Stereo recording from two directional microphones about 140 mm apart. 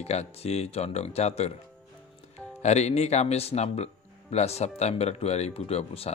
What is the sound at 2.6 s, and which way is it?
Speech, 50° left (ahead or behind).